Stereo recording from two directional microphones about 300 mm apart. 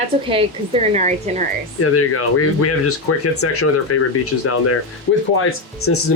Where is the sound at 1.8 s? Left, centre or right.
Left.